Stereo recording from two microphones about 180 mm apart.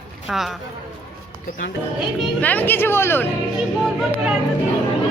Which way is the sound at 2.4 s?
10° left (ahead or behind).